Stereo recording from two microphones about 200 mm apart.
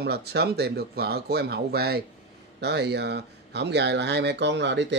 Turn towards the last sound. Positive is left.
turn(degrees=-60)  # may be behind; listen again after turning